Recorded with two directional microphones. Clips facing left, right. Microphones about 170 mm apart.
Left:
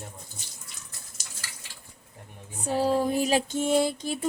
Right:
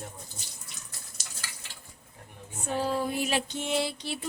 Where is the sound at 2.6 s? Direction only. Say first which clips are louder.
Left 5 dB; 40° left (ahead or behind).